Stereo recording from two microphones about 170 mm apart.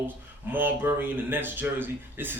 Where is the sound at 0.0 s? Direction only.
10° right (ahead or behind).